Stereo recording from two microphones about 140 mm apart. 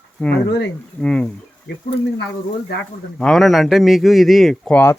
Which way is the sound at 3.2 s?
5° left (ahead or behind).